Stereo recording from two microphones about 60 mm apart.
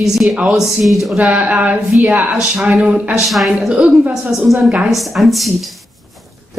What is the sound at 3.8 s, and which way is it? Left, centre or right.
Speech, right.